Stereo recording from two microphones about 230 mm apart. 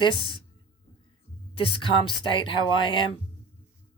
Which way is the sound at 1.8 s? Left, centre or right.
Left.